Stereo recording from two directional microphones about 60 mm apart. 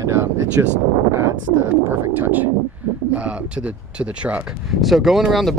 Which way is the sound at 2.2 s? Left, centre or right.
Right.